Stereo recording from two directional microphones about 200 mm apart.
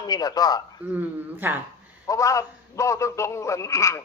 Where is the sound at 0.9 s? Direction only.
10° right (ahead or behind).